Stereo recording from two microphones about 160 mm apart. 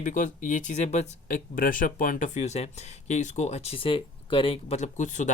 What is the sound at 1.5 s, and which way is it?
Speech, 60° left (ahead or behind).